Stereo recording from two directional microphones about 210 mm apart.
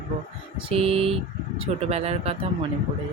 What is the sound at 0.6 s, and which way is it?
Speech, 25° right (ahead or behind).